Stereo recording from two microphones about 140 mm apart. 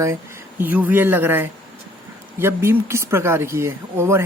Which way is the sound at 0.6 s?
10° right (ahead or behind).